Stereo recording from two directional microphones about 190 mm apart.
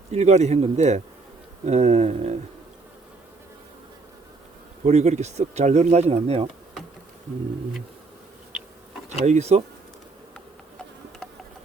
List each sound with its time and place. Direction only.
0.1 s speech: 35° right (ahead or behind)
4.9 s speech: 35° right (ahead or behind)
9.2 s speech: 35° right (ahead or behind)